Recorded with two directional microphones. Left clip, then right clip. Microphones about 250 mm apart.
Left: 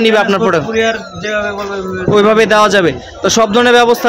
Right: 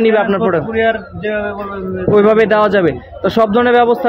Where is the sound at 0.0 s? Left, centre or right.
Centre.